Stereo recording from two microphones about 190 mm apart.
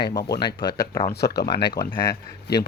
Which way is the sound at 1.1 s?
60° left (ahead or behind).